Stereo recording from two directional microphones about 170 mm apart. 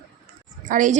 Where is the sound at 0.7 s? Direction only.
50° right (ahead or behind).